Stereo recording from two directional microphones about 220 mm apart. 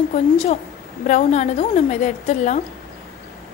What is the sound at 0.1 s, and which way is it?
A woman's voice, 30° left (ahead or behind).